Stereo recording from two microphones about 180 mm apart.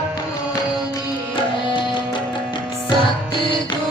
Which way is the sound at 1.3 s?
25° left (ahead or behind).